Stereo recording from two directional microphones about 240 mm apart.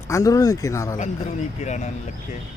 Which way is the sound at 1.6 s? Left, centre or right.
Left.